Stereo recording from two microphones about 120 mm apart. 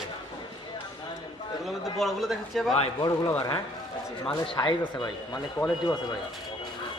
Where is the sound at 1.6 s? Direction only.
Centre (ahead or behind).